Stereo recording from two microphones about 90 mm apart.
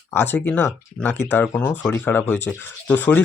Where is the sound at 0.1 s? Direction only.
25° left (ahead or behind).